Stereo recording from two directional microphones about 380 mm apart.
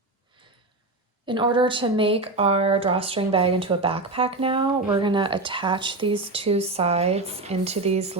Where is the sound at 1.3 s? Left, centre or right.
Centre.